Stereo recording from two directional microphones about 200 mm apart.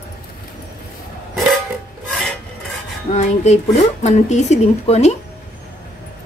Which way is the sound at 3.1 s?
35° left (ahead or behind).